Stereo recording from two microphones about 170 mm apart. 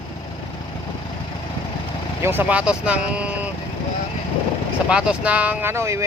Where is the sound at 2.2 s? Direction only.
10° right (ahead or behind).